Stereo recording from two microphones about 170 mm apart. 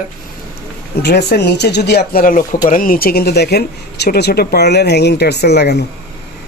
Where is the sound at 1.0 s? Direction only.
75° left (ahead or behind).